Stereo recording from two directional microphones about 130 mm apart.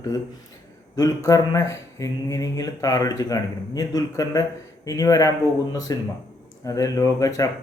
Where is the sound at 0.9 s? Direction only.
25° left (ahead or behind).